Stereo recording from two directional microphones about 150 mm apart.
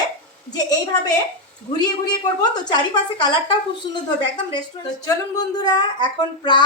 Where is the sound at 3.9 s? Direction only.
30° left (ahead or behind).